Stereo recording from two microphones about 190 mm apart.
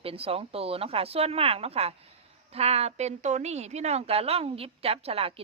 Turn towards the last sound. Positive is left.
turn(degrees=-30)  # may be behind; listen again after turning